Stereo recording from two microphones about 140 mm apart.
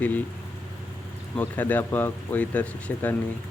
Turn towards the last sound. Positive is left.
turn(degrees=10)  # may be behind; listen again after turning